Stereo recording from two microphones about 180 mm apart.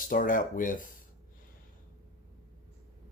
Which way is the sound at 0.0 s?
50° left (ahead or behind).